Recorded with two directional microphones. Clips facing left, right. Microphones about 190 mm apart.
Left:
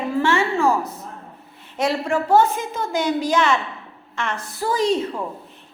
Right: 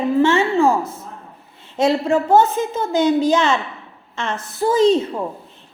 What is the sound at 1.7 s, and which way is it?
A woman's voice, 25° right (ahead or behind).